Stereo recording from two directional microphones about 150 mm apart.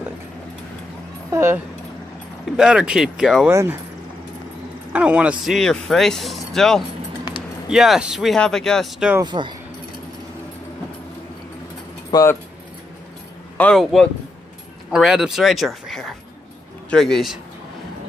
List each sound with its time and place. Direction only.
1.3 s speech: 15° right (ahead or behind)
2.5 s speech: 5° right (ahead or behind)
3.4 s speech: 15° right (ahead or behind)
4.9 s a man's voice: 10° right (ahead or behind)
5.4 s speech: centre (ahead or behind)
7.2 s music: 30° left (ahead or behind)
7.7 s speech: 5° right (ahead or behind)
9.2 s speech: 30° right (ahead or behind)
12.1 s speech: 20° left (ahead or behind)
13.6 s speech: 5° left (ahead or behind)